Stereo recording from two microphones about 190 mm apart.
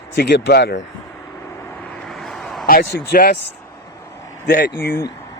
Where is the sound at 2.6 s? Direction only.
50° left (ahead or behind).